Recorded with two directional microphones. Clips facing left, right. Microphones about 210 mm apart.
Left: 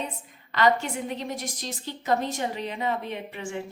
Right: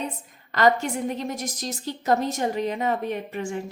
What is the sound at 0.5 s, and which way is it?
A woman's voice, 45° right (ahead or behind).